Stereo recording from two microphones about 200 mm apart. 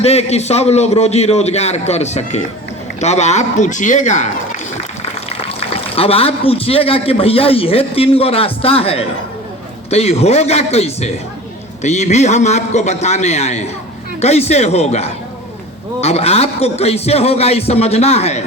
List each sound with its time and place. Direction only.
0.0 s a man's voice: 30° left (ahead or behind)
5.4 s a man's voice: 30° left (ahead or behind)